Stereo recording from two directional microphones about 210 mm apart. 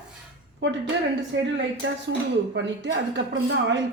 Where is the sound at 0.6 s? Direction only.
55° right (ahead or behind).